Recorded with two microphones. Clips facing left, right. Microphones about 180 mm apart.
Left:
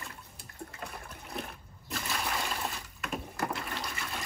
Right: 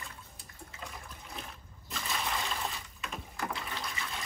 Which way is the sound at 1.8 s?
Centre (ahead or behind).